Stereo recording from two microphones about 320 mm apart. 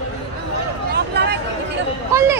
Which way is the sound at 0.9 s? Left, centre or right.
Right.